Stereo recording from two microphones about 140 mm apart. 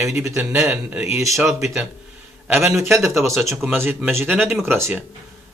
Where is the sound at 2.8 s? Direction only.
20° right (ahead or behind).